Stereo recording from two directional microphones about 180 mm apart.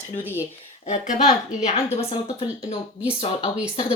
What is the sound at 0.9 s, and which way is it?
A woman's voice, 40° left (ahead or behind).